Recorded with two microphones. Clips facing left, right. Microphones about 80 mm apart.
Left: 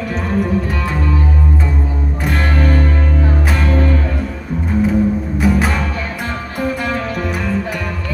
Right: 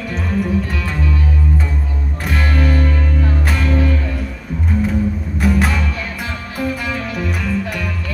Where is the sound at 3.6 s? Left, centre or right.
Left.